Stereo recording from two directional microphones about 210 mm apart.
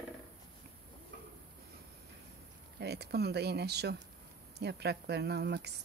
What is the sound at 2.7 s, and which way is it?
Speech, 50° right (ahead or behind).